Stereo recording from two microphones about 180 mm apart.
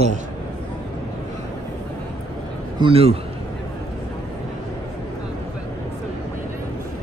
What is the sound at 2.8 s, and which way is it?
Speech, 35° right (ahead or behind).